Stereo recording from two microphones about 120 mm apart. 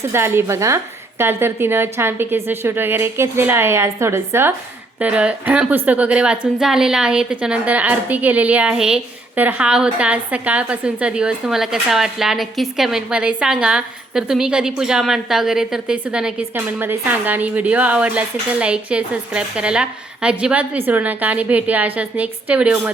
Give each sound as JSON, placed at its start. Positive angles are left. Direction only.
{"t": 0.1, "sound": "a woman's voice", "side_deg": -20}